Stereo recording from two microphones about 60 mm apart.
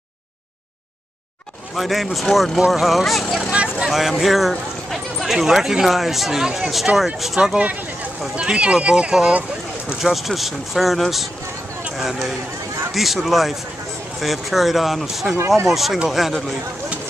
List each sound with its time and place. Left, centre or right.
1.8 s speech: centre
15.3 s speech: right
15.6 s speech: centre